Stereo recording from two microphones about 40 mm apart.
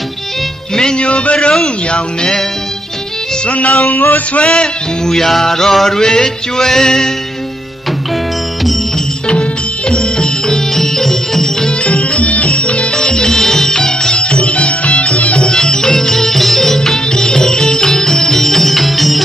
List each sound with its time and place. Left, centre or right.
0.9 s a man's voice: left
1.9 s a man's voice: centre
3.4 s music: left
3.8 s music: left
4.5 s music: centre
9.3 s music: left; by 11.5 s centre
11.8 s music: left
12.9 s music: centre
14.1 s music: left
15.5 s music: centre